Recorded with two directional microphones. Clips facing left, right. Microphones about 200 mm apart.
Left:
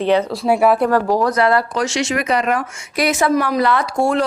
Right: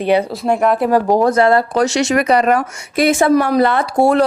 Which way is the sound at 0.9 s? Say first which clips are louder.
Right 3 dB; 20° right (ahead or behind).